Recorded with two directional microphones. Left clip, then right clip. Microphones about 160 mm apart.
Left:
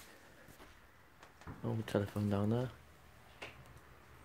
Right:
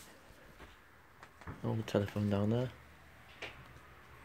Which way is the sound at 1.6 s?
5° right (ahead or behind).